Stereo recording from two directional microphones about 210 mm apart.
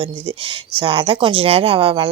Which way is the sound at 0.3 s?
25° right (ahead or behind).